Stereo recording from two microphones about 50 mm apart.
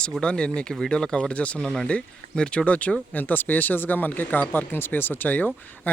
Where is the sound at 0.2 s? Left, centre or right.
Centre.